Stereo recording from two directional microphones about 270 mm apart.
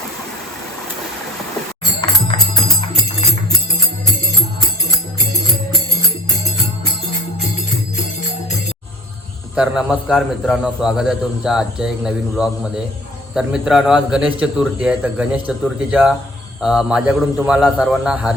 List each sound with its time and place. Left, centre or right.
2.0 s music: centre
9.6 s a man's voice: centre